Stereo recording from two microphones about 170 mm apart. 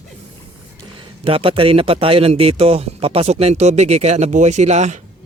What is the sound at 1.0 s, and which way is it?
A man's voice, 30° right (ahead or behind).